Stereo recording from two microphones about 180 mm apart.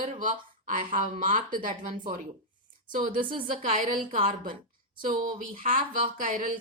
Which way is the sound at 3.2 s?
30° right (ahead or behind).